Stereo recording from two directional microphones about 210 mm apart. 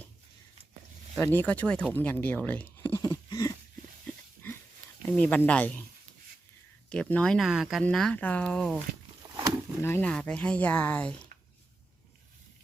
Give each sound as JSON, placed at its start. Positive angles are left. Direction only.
{"t": 1.1, "sound": "speech", "side_deg": 10}
{"t": 5.0, "sound": "speech", "side_deg": 5}
{"t": 6.9, "sound": "speech", "side_deg": 5}
{"t": 9.3, "sound": "a sound", "side_deg": -20}
{"t": 9.8, "sound": "speech", "side_deg": 10}